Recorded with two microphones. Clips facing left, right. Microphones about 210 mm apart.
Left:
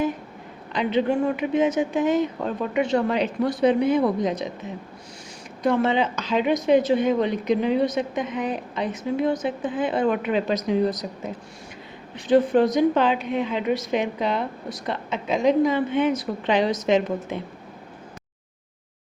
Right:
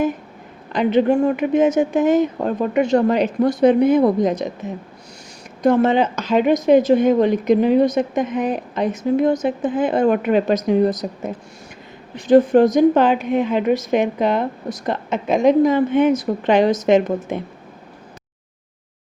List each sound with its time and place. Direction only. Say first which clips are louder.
0.7 s speech: right 6 dB; 50° right (ahead or behind)
5.6 s speech: right 6 dB; 45° right (ahead or behind)
12.1 s speech: right 6 dB; 45° right (ahead or behind)